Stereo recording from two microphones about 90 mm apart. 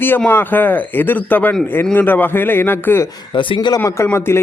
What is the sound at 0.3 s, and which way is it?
A man's voice, 20° left (ahead or behind).